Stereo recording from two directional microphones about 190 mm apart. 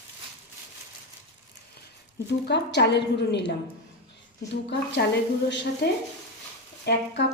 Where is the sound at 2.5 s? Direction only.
65° left (ahead or behind).